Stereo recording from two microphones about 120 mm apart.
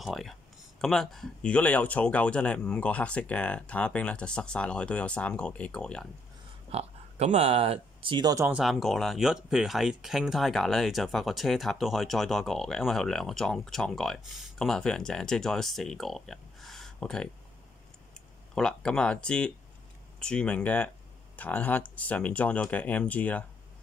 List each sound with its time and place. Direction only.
0.0 s speech: centre (ahead or behind)
6.7 s speech: 60° right (ahead or behind); by 8.4 s 40° right (ahead or behind)
8.5 s speech: 5° right (ahead or behind)
18.5 s speech: 5° left (ahead or behind)